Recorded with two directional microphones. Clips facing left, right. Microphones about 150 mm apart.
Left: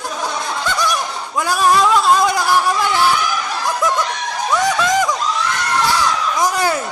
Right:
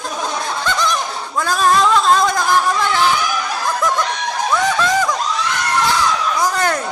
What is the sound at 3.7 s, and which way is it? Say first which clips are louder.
Snicker: left 1 dB; 10° left (ahead or behind).